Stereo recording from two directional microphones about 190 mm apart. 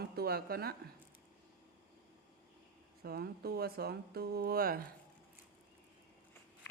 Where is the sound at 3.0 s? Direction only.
55° right (ahead or behind).